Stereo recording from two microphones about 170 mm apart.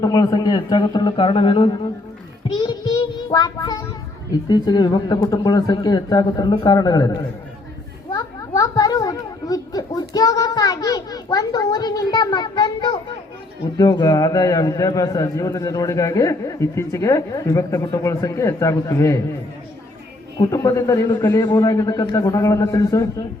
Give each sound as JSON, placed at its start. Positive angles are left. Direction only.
{"t": 0.0, "sound": "a man's voice", "side_deg": 25}
{"t": 2.6, "sound": "child singing", "side_deg": 25}
{"t": 4.3, "sound": "a man's voice", "side_deg": 25}
{"t": 8.1, "sound": "a sound", "side_deg": 20}
{"t": 13.7, "sound": "a man's voice", "side_deg": 20}
{"t": 20.4, "sound": "a man's voice", "side_deg": 20}